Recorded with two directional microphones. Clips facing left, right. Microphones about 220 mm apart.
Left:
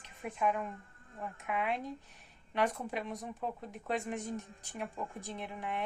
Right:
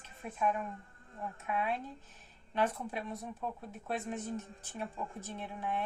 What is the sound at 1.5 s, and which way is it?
Speech, 15° left (ahead or behind).